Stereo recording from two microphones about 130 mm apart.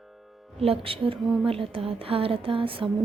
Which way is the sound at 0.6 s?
45° right (ahead or behind).